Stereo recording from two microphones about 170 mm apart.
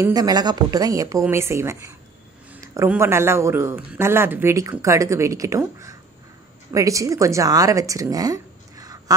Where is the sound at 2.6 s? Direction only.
20° right (ahead or behind).